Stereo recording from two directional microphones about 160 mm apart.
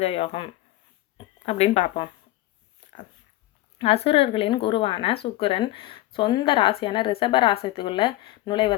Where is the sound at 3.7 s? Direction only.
35° left (ahead or behind).